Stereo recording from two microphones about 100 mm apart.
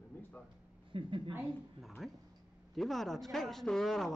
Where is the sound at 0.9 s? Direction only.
60° right (ahead or behind).